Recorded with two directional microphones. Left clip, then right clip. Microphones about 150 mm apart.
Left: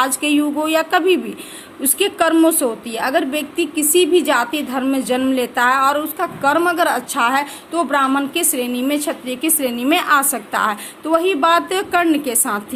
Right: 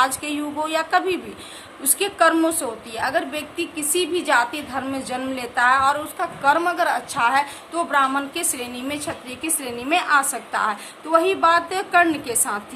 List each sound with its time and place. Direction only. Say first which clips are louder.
0.0 s a woman's voice: left 4 dB; 50° left (ahead or behind)